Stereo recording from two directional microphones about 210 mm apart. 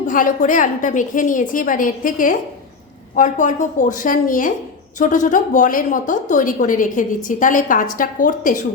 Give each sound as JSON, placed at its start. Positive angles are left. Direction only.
{"t": 0.1, "sound": "a woman's voice", "side_deg": 40}